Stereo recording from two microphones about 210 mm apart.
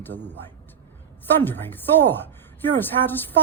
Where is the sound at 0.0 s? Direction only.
10° left (ahead or behind).